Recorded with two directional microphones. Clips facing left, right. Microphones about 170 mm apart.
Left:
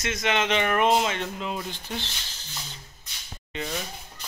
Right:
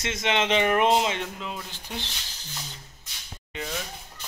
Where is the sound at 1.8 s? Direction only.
15° right (ahead or behind).